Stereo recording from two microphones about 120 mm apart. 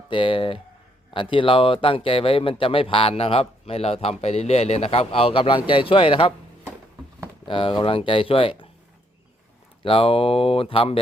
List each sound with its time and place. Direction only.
0.1 s speech: 45° left (ahead or behind)
7.4 s speech: 45° left (ahead or behind)
9.8 s speech: 50° left (ahead or behind)